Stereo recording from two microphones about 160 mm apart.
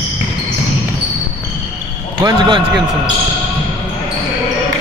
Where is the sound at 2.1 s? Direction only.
30° right (ahead or behind).